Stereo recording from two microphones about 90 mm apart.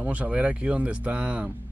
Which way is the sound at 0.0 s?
15° right (ahead or behind).